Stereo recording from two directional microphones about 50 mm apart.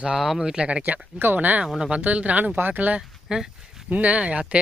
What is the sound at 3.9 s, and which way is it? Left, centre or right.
Speech, right.